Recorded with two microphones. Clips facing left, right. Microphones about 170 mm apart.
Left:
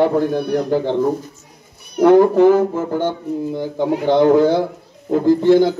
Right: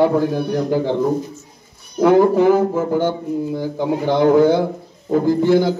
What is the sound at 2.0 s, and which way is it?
Speech, 5° right (ahead or behind).